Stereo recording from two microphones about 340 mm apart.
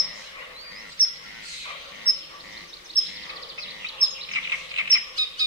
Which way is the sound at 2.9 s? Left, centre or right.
Left.